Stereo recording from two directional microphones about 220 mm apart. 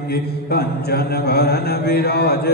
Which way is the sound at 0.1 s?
45° left (ahead or behind).